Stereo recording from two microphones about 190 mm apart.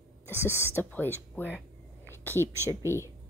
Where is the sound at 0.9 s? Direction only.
10° left (ahead or behind).